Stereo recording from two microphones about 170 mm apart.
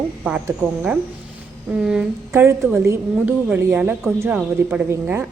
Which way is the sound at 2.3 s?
15° right (ahead or behind).